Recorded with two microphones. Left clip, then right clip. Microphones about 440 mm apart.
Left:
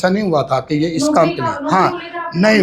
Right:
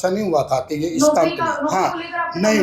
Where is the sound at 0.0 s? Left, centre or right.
Left.